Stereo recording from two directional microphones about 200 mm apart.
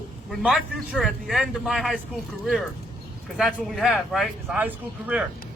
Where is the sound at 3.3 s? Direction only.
Centre (ahead or behind).